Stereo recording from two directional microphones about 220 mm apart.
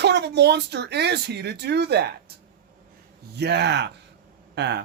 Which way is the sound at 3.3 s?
50° right (ahead or behind).